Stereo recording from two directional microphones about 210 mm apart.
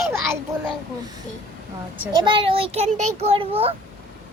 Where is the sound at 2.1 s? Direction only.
25° right (ahead or behind).